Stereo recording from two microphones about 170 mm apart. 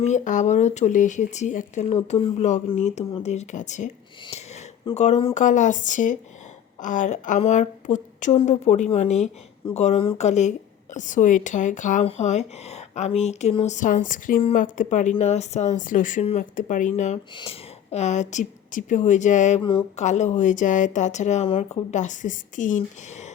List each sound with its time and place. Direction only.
0.0 s speech: 45° left (ahead or behind)